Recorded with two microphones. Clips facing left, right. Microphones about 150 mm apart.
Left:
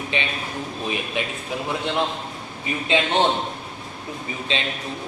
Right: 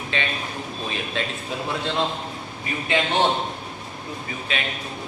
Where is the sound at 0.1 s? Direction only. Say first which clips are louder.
Even; 20° left (ahead or behind).